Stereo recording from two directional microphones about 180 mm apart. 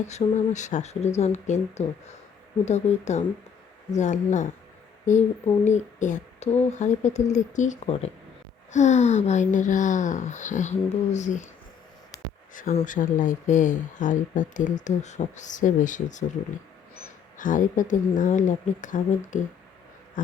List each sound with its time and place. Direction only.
0.0 s speech: 40° left (ahead or behind)
12.1 s a sound: 20° left (ahead or behind)
12.7 s speech: 45° left (ahead or behind)
17.3 s speech: 45° left (ahead or behind)